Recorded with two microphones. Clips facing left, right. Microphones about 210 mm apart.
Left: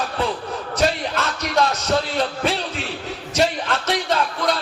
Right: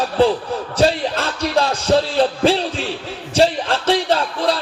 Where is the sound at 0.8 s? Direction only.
30° right (ahead or behind).